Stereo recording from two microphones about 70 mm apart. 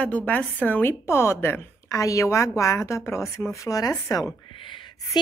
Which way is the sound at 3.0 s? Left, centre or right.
Left.